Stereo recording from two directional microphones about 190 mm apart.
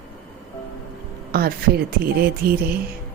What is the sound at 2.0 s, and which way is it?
Speech, 50° right (ahead or behind).